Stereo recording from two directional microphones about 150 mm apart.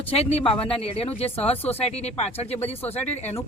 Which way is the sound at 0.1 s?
40° left (ahead or behind).